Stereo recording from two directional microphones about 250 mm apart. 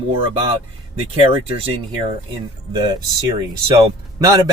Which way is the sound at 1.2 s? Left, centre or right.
Right.